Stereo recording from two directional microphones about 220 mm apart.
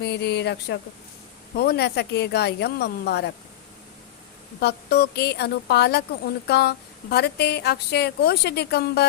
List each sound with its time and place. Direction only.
0.0 s speech: 50° left (ahead or behind)
4.6 s speech: 45° left (ahead or behind)